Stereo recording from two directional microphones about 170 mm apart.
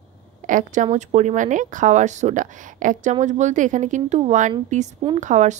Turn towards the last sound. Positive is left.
turn(degrees=-45)  # may be behind; listen again after turning